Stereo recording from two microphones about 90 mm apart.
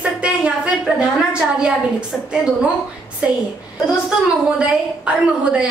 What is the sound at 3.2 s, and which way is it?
Speech, 10° right (ahead or behind).